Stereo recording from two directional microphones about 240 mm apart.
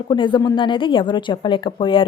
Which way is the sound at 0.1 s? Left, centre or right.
Centre.